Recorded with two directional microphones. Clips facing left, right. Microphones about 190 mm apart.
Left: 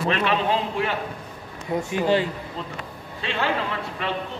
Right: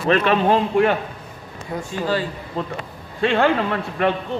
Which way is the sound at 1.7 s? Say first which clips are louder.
Left 2 dB; 20° left (ahead or behind).